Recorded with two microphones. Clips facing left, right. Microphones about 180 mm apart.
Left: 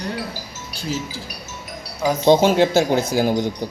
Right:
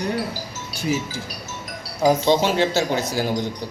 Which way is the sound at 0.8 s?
15° right (ahead or behind).